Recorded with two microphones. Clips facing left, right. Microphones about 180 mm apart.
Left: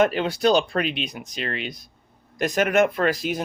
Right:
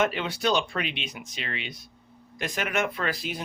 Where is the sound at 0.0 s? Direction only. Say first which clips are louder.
Left 6 dB; 40° left (ahead or behind).